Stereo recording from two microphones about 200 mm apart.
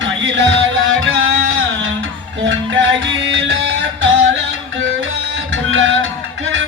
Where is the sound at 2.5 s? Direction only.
65° right (ahead or behind).